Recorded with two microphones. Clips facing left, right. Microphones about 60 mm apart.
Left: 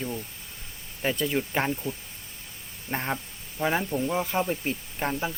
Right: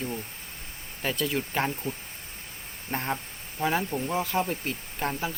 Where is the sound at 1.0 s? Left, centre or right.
Centre.